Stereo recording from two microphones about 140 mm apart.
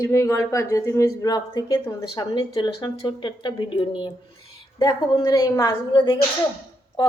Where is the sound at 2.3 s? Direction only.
35° left (ahead or behind).